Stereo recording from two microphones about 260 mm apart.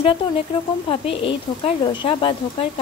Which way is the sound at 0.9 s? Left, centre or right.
Centre.